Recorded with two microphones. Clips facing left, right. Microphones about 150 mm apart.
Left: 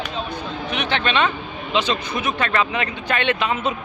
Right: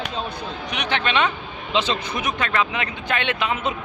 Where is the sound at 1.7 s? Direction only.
25° right (ahead or behind).